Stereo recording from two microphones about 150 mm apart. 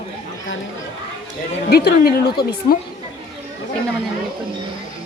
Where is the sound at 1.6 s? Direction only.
90° left.